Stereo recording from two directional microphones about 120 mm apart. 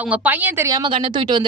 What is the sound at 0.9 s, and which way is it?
Speech, 40° right (ahead or behind).